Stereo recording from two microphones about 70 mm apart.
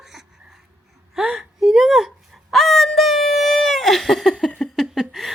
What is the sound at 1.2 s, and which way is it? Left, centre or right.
Speech, centre.